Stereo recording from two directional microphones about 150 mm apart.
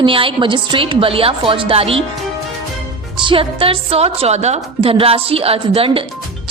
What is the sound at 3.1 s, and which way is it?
A woman's voice, 35° right (ahead or behind).